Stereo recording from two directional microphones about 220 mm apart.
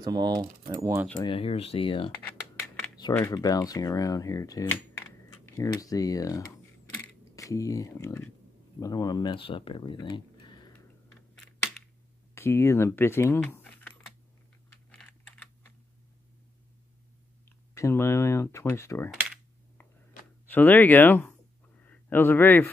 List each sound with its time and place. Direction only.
0.0 s speech: 20° right (ahead or behind)
1.2 s speech: 25° left (ahead or behind)
2.6 s computer keyboard: 5° left (ahead or behind)
3.0 s speech: 15° left (ahead or behind)
12.4 s speech: 10° left (ahead or behind)
14.9 s typing: 5° left (ahead or behind)
17.7 s speech: 10° left (ahead or behind)
20.4 s speech: 10° left (ahead or behind)
21.7 s a sound: 5° left (ahead or behind)